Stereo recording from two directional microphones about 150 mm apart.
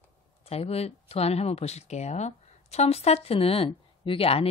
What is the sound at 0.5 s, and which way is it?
Speech, 45° left (ahead or behind).